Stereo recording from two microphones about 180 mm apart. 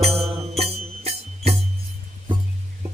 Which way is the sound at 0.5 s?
35° right (ahead or behind).